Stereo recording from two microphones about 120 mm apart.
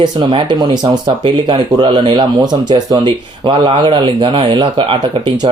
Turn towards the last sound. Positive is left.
turn(degrees=-45)  # may be behind; listen again after turning